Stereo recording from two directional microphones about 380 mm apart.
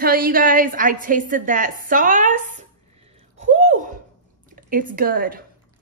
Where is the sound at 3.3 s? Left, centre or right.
Centre.